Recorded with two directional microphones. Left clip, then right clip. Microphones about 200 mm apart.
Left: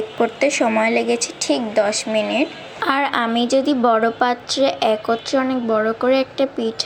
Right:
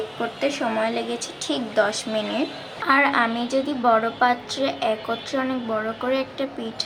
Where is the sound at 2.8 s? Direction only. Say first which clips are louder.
Even; 25° left (ahead or behind).